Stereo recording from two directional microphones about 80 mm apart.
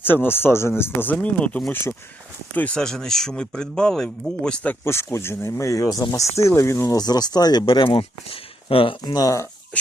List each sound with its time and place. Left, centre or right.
0.0 s speech: left
2.7 s speech: centre
5.1 s speech: left
6.8 s speech: left
9.1 s speech: left